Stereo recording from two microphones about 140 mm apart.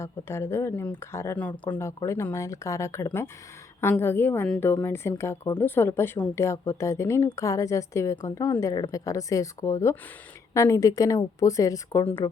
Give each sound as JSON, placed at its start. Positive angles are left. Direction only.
{"t": 0.0, "sound": "a woman's voice", "side_deg": 20}